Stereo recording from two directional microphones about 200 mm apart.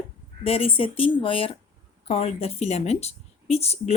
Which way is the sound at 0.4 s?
30° left (ahead or behind).